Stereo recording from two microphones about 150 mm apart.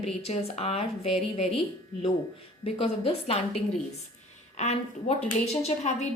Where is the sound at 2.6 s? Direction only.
40° left (ahead or behind).